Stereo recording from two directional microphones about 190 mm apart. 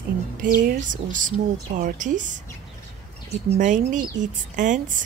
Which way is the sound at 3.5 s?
40° right (ahead or behind).